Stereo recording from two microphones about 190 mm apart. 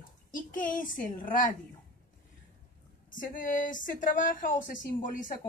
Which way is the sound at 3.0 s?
45° left (ahead or behind).